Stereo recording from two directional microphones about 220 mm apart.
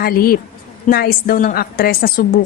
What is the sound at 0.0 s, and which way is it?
A woman's voice, 40° left (ahead or behind).